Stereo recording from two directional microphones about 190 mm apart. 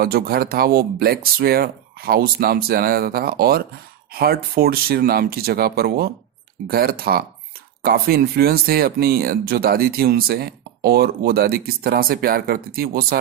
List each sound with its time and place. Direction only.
0.0 s speech: 55° right (ahead or behind)